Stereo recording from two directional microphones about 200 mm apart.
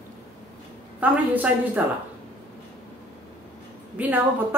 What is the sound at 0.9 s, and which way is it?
Speech, 10° right (ahead or behind).